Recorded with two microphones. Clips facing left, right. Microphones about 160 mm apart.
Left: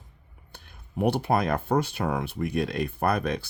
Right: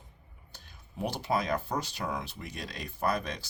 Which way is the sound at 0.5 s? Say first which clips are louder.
Left 10 dB; 60° left (ahead or behind).